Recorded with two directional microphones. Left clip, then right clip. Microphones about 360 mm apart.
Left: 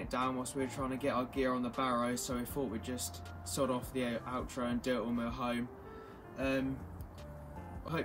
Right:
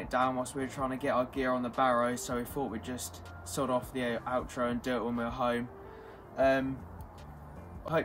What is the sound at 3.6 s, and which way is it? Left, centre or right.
Speech, centre.